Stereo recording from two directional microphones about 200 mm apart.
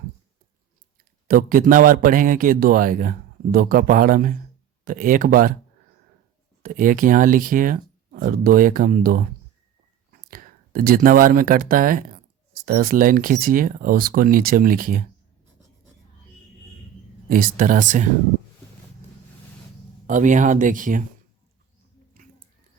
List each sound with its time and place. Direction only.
1.3 s speech: 45° right (ahead or behind)
6.6 s speech: 45° right (ahead or behind)
17.2 s speech: 45° right (ahead or behind)
20.1 s speech: 40° right (ahead or behind)